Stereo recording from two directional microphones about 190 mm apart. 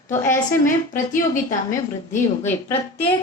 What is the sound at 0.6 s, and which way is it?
A woman's voice, 45° left (ahead or behind).